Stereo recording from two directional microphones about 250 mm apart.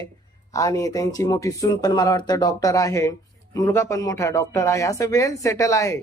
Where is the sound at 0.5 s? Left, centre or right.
Centre.